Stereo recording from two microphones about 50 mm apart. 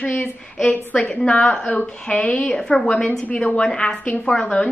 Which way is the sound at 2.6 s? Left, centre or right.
Centre.